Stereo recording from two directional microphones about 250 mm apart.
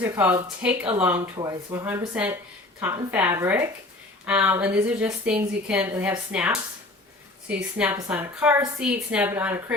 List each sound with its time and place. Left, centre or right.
0.0 s a woman's voice: centre